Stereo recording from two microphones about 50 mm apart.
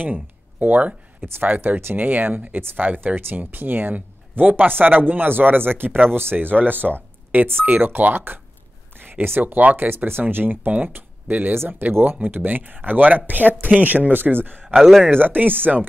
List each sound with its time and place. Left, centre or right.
0.0 s speech: right